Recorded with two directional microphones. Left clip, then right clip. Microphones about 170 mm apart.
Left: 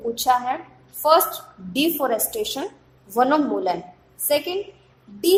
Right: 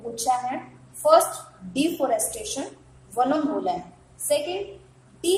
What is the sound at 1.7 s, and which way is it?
A woman's voice, 45° left (ahead or behind).